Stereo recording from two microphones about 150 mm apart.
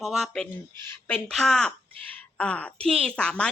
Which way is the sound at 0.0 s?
Centre (ahead or behind).